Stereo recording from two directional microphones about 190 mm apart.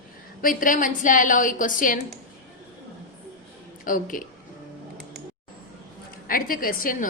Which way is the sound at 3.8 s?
45° left (ahead or behind).